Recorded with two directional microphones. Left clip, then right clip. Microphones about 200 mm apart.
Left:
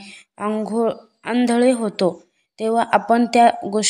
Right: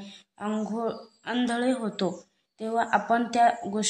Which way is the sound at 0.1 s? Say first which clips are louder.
Left 9 dB; 30° left (ahead or behind).